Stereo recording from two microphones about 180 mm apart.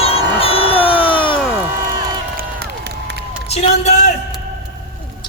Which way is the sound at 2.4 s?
65° right (ahead or behind).